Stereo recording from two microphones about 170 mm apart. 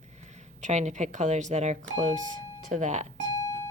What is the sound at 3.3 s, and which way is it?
Alarm clock, 20° left (ahead or behind).